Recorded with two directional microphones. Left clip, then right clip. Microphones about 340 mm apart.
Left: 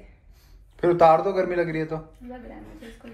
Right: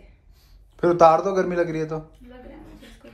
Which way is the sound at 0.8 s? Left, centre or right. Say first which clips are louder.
Right 1 dB; right.